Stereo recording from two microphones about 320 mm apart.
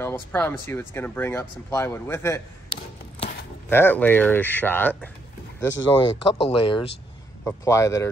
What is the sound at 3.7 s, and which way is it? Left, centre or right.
Speech, centre.